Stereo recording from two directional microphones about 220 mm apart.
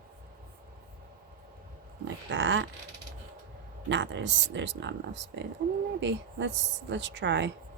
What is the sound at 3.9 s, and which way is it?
Speech, 55° right (ahead or behind).